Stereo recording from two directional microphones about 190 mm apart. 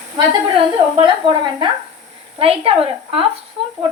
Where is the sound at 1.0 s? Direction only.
25° right (ahead or behind).